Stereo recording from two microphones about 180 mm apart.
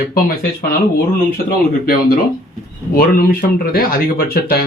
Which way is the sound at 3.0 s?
55° left (ahead or behind).